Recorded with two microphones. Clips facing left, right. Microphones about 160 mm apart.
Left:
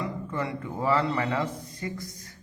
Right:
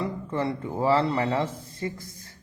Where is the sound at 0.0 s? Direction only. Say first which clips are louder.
Right 3 dB; 30° right (ahead or behind).